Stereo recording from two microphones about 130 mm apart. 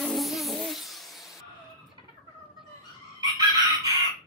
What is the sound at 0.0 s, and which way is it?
Music, centre (ahead or behind).